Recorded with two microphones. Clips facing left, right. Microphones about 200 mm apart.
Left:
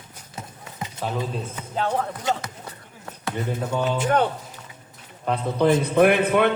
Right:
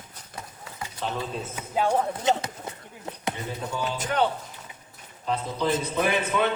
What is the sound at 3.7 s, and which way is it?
Speech, 65° left (ahead or behind).